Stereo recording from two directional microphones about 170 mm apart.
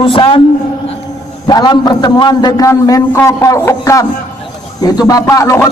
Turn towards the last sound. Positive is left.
turn(degrees=15)  # may be behind; listen again after turning